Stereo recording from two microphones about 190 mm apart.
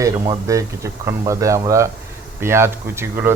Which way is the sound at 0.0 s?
15° right (ahead or behind).